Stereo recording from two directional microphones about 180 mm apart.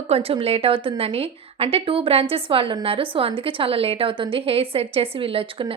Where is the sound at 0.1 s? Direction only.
35° right (ahead or behind).